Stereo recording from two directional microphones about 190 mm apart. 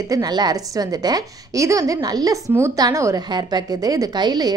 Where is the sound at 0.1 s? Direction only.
20° right (ahead or behind).